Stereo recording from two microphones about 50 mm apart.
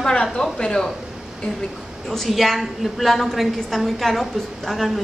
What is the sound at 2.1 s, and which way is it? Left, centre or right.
A woman's voice, centre.